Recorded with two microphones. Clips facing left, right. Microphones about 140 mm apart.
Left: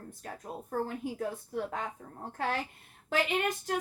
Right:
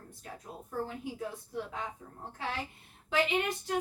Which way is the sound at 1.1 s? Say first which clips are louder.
Left 3 dB; 50° left (ahead or behind).